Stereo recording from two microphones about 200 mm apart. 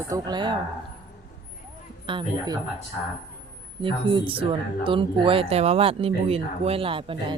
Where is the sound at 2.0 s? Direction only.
25° right (ahead or behind).